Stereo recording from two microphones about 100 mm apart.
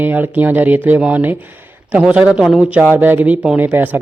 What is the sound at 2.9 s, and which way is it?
Speech, 20° right (ahead or behind).